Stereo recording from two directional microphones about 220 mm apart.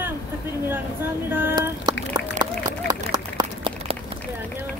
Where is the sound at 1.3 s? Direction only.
10° right (ahead or behind).